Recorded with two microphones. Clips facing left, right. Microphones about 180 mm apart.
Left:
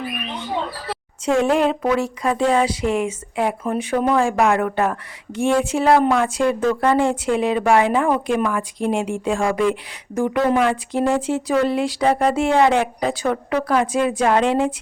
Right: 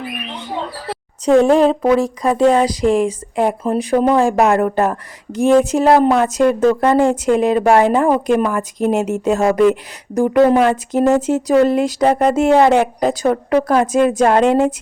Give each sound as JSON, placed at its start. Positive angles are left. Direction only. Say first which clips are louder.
{"t": 1.2, "sound": "speech", "louder": "right 6 dB", "side_deg": -35}